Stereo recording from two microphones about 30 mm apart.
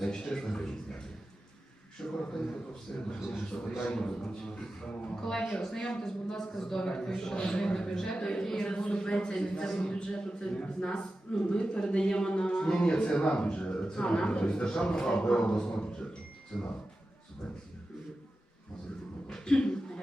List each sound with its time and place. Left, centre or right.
0.0 s a man's voice: centre
2.0 s a man's voice: centre
2.9 s a man's voice: left; by 6.7 s centre
6.7 s speech: left
7.3 s a man's voice: left
7.7 s a man's voice: left
16.5 s speech: left
19.3 s a sound: left